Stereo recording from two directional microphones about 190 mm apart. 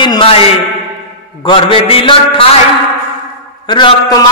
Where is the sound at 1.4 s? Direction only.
25° left (ahead or behind).